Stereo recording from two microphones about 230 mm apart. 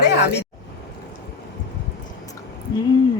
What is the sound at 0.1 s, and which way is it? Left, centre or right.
Speech, left.